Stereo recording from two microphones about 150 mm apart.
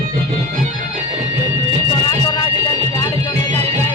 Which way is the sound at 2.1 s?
25° left (ahead or behind).